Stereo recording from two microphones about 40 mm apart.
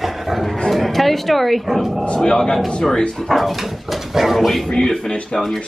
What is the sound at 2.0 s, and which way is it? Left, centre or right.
A man's voice, centre.